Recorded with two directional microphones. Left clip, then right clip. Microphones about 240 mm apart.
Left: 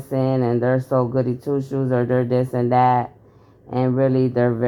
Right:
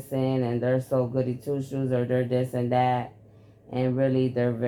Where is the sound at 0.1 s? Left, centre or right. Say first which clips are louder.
Left 7 dB; left.